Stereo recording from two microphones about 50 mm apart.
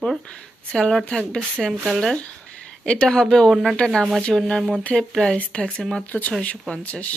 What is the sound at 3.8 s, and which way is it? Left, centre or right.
Speech, centre.